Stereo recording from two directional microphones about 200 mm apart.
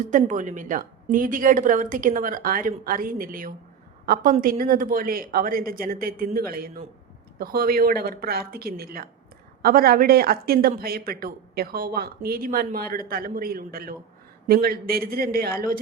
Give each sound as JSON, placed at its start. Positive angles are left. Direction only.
{"t": 0.1, "sound": "speech", "side_deg": -40}